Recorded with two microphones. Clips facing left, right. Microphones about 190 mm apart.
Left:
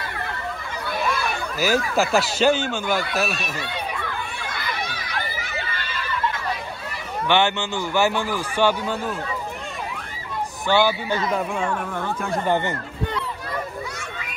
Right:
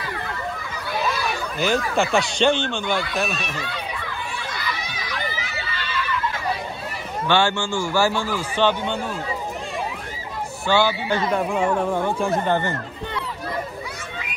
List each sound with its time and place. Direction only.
1.6 s speech: 5° left (ahead or behind)
4.5 s crowd: 55° left (ahead or behind)
7.2 s a man's voice: 20° left (ahead or behind); by 9.1 s 5° left (ahead or behind)
10.7 s a man's voice: 15° left (ahead or behind)
11.5 s speech: 20° right (ahead or behind)
12.4 s a man's voice: 15° left (ahead or behind)